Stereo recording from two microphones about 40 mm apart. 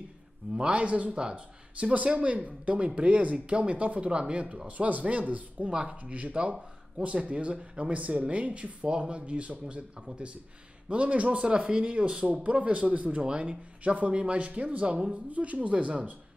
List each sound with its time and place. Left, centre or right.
0.6 s speech: right
4.6 s speech: right
5.7 s speech: right
10.9 s speech: right
11.4 s speech: right